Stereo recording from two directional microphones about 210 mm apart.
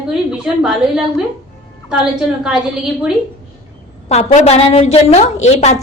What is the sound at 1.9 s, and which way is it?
Speech, 5° right (ahead or behind).